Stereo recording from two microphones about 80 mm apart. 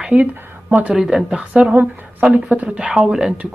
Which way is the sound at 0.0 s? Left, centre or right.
Centre.